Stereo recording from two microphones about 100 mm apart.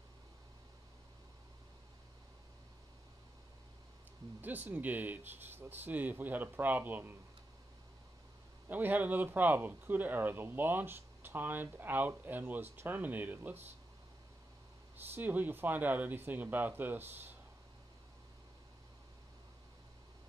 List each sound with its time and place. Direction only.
4.4 s speech: 20° right (ahead or behind)
8.6 s speech: 20° right (ahead or behind)
15.1 s speech: 20° right (ahead or behind)